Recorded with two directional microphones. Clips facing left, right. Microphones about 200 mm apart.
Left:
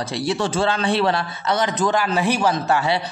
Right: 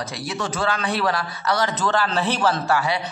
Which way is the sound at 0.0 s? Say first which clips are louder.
Left 6 dB; 30° left (ahead or behind).